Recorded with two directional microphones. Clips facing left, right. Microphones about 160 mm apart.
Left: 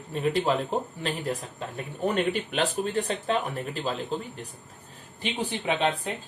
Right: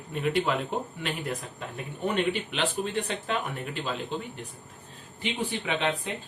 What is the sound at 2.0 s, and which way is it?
Speech, 40° left (ahead or behind).